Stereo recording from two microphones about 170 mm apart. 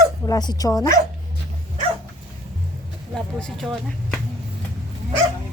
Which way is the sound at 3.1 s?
Centre (ahead or behind).